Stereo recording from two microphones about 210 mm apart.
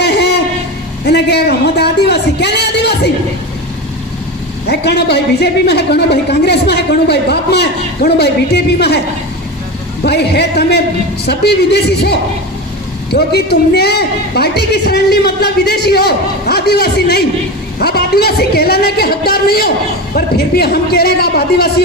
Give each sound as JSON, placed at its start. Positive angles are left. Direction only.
{"t": 0.0, "sound": "a sound", "side_deg": 50}
{"t": 4.6, "sound": "a woman's voice", "side_deg": 50}
{"t": 10.0, "sound": "a woman's voice", "side_deg": 50}